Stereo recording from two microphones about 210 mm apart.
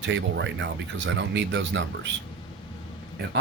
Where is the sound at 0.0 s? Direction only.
60° right (ahead or behind).